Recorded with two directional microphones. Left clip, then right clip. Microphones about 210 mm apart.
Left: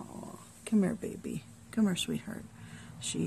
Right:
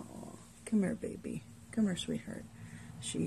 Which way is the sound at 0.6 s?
20° left (ahead or behind).